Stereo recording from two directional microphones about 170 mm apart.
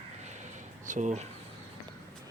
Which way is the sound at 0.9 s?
45° right (ahead or behind).